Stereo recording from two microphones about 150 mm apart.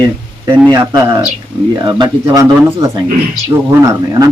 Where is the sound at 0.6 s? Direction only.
25° right (ahead or behind).